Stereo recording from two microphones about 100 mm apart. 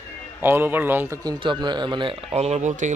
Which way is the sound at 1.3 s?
45° right (ahead or behind).